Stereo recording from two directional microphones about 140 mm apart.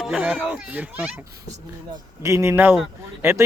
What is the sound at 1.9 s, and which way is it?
Speech, 20° right (ahead or behind).